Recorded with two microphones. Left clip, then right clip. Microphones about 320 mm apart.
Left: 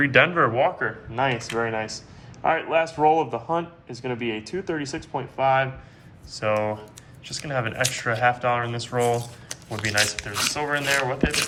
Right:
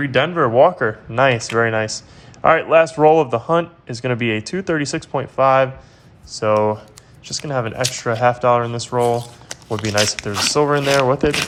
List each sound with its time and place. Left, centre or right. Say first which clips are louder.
0.0 s speech: right 1 dB; centre
6.3 s speech: right 8 dB; centre